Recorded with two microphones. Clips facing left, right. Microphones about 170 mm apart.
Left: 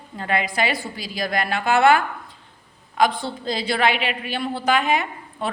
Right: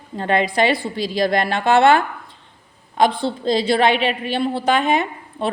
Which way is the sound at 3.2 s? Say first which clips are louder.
Right 7 dB; 20° right (ahead or behind).